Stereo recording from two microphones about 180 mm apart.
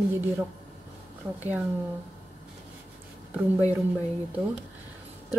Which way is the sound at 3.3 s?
10° right (ahead or behind).